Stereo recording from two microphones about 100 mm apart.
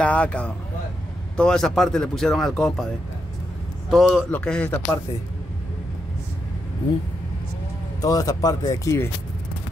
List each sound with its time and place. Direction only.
0.0 s a sound: 10° left (ahead or behind)
1.3 s speech: 5° left (ahead or behind)
3.9 s speech: 5° right (ahead or behind)
4.3 s speech: 15° left (ahead or behind)
8.0 s speech: 35° left (ahead or behind)